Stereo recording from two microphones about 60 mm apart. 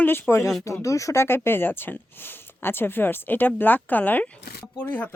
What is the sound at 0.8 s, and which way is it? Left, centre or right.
Speech, left.